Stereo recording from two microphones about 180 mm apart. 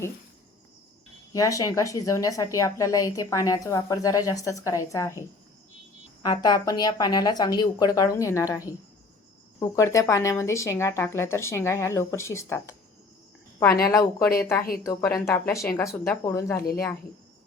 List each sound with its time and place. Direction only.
1.3 s a woman's voice: 20° left (ahead or behind)
6.2 s a woman's voice: 20° left (ahead or behind)
13.8 s speech: 20° left (ahead or behind)